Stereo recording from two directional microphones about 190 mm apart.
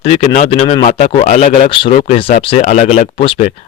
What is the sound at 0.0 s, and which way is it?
Speech, 30° left (ahead or behind).